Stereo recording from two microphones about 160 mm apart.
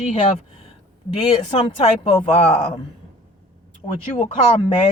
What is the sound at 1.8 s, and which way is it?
Speech, 40° left (ahead or behind).